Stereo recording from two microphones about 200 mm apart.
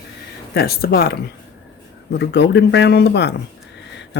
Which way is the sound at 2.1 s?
55° left (ahead or behind).